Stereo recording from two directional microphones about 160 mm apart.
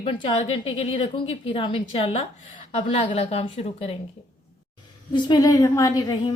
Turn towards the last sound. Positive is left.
turn(degrees=20)  # may be behind; listen again after turning